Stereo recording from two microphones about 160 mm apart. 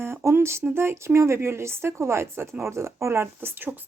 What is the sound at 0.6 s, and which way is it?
A woman's voice, 15° right (ahead or behind).